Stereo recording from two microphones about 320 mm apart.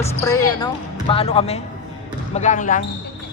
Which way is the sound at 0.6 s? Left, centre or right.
Centre.